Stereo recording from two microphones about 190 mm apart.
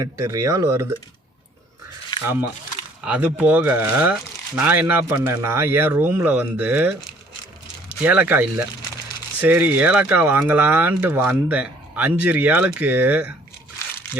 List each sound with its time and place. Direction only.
0.0 s speech: 15° right (ahead or behind)
2.2 s speech: 10° right (ahead or behind)